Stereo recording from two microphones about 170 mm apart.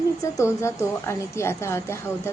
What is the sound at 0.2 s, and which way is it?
A woman's voice, 15° left (ahead or behind).